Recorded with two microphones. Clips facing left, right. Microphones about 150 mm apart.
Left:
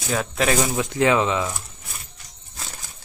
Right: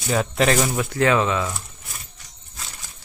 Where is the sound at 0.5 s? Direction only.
15° left (ahead or behind).